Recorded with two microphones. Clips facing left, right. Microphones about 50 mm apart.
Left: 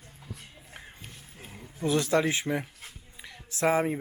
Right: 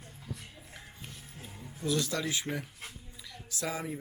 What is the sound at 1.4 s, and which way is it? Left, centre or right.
Speech, left.